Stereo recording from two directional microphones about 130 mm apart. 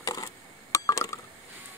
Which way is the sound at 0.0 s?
25° left (ahead or behind).